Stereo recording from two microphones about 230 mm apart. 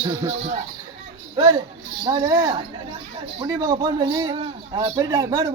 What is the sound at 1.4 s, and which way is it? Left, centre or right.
A child's voice, centre.